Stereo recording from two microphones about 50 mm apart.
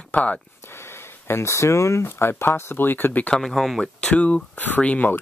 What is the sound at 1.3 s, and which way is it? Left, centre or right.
Speech, left.